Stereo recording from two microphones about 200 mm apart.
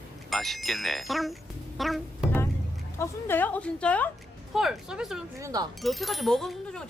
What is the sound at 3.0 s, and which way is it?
Speech, 10° left (ahead or behind).